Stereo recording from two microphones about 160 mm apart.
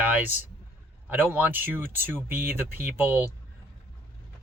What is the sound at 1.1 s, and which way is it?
Speech, 15° right (ahead or behind).